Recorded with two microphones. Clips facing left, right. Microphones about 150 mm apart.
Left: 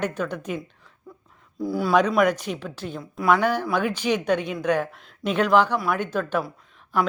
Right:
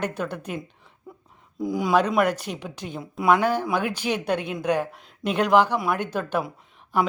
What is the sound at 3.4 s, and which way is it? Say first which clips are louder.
Speech: even; 10° right (ahead or behind).